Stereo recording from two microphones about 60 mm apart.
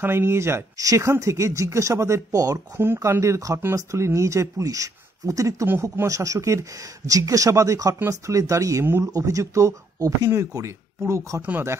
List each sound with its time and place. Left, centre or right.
0.0 s speech: right
0.7 s speech: right
2.3 s speech: right
2.8 s speech: right
7.1 s speech: right
11.0 s speech: right